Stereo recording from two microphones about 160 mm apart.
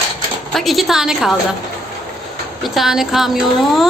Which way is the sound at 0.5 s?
Centre (ahead or behind).